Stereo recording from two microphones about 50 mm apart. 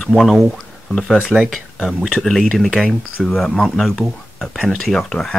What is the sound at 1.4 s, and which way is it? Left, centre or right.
Speech, centre.